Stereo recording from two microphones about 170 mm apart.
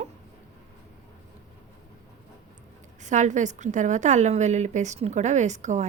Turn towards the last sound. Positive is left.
turn(degrees=-45)  # may be behind; listen again after turning